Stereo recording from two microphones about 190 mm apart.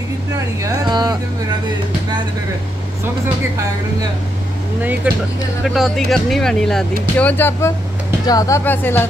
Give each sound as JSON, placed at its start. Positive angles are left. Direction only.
{"t": 0.6, "sound": "speech", "side_deg": -20}
{"t": 5.1, "sound": "speech", "side_deg": -10}